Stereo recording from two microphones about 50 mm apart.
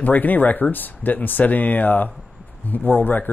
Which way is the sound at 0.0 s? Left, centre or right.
Left.